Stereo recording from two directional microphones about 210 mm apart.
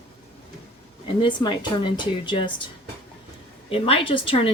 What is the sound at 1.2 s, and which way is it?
A woman's voice, 20° left (ahead or behind).